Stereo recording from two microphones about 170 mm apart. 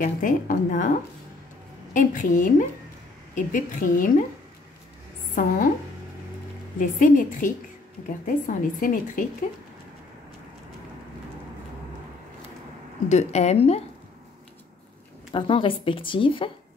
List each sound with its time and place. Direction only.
0.0 s speech: 50° left (ahead or behind)
2.0 s speech: 50° left (ahead or behind)
5.3 s speech: 55° left (ahead or behind)
6.8 s speech: 50° left (ahead or behind)
13.1 s a woman's voice: 40° left (ahead or behind)
15.3 s a woman's voice: 30° left (ahead or behind)